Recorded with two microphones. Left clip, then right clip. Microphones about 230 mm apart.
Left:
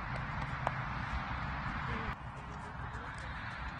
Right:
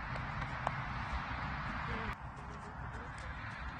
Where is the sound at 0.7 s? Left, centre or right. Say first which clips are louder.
Left 1 dB; right.